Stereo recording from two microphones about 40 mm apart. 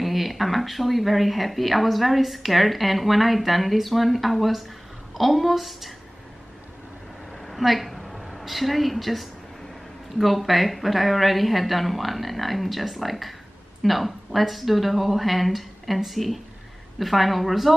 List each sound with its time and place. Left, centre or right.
0.0 s speech: centre
7.4 s a woman's voice: centre